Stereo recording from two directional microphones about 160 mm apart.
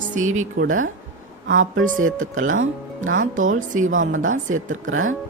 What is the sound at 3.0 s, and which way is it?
Speech, 55° right (ahead or behind).